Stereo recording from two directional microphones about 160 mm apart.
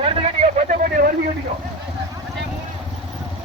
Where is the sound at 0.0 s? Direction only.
45° right (ahead or behind).